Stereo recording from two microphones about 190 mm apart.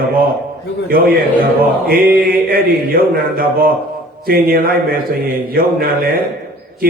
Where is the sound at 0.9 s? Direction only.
50° right (ahead or behind).